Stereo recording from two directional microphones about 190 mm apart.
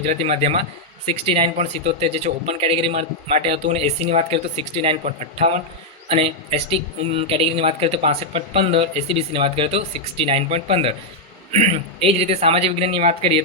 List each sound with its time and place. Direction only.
0.0 s a man's voice: 35° right (ahead or behind)